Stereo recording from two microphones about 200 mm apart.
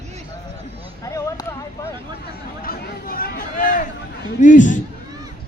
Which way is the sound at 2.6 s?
45° left (ahead or behind).